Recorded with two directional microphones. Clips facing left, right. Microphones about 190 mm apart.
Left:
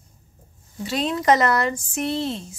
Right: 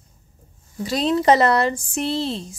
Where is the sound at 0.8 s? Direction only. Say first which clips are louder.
Right 3 dB; 35° right (ahead or behind).